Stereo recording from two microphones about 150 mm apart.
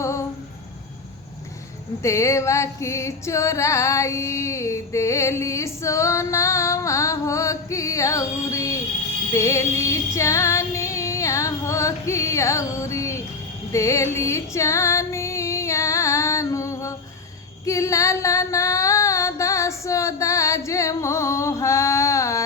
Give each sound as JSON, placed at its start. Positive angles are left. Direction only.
{"t": 2.0, "sound": "music", "side_deg": 20}
{"t": 17.7, "sound": "female singing", "side_deg": 20}